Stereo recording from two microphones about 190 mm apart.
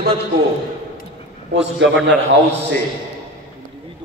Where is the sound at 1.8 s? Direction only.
75° right (ahead or behind).